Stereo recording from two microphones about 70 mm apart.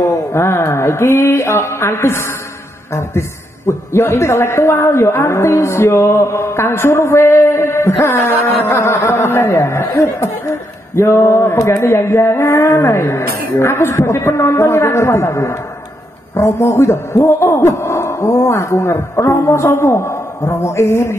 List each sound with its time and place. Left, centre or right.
0.0 s mantra: left
2.9 s a man's voice: left